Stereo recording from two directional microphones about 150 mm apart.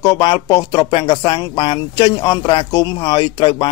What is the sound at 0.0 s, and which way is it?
Speech, 30° left (ahead or behind).